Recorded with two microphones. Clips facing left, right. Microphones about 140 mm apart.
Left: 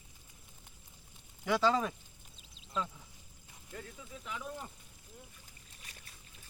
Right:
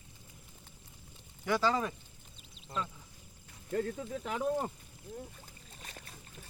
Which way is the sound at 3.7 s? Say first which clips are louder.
Right 13 dB; 60° right (ahead or behind).